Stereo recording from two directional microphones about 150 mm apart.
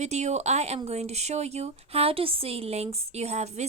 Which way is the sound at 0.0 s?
50° right (ahead or behind).